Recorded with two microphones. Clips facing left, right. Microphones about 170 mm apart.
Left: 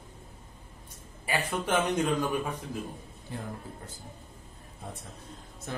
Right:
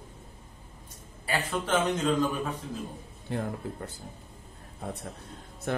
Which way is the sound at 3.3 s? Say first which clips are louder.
Right 7 dB; 65° right (ahead or behind).